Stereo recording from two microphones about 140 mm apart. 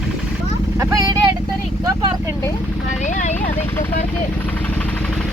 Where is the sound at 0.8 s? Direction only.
25° right (ahead or behind).